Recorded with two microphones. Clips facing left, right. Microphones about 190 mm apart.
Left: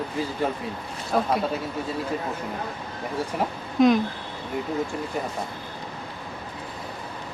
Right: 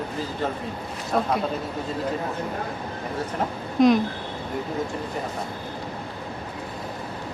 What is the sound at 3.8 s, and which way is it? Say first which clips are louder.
Speech: right 1 dB; centre (ahead or behind).